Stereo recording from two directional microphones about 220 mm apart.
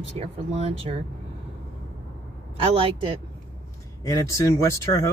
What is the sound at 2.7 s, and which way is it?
Speech, 25° right (ahead or behind).